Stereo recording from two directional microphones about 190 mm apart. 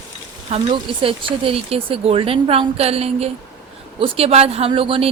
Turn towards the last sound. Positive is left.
turn(degrees=-30)  # may be behind; listen again after turning